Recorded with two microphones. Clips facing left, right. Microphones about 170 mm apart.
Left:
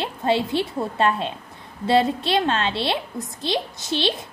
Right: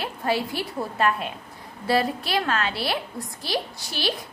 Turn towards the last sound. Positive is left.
turn(degrees=25)  # may be behind; listen again after turning